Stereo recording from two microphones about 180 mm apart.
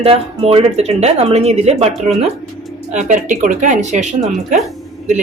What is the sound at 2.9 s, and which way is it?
Speech, 40° right (ahead or behind).